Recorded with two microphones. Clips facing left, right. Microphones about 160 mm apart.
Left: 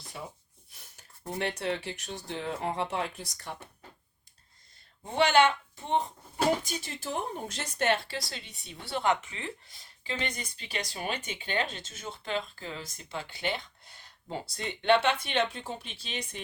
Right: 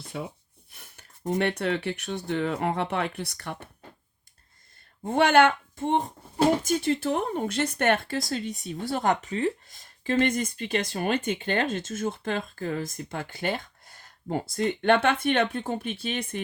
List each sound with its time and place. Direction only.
0.7 s a sound: 60° right (ahead or behind)
1.3 s speech: 60° right (ahead or behind)
5.0 s speech: 50° right (ahead or behind)